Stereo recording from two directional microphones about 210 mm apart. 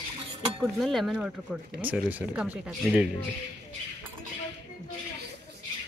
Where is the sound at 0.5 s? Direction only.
Centre (ahead or behind).